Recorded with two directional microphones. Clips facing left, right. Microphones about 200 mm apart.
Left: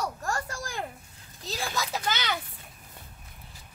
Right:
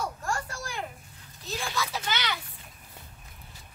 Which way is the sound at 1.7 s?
45° left (ahead or behind).